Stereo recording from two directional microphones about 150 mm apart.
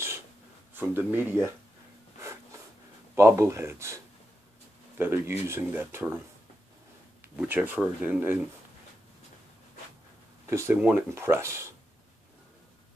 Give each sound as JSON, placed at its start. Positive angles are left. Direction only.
{"t": 0.7, "sound": "speech", "side_deg": -15}
{"t": 3.2, "sound": "speech", "side_deg": -20}
{"t": 7.3, "sound": "speech", "side_deg": -10}
{"t": 10.4, "sound": "speech", "side_deg": -20}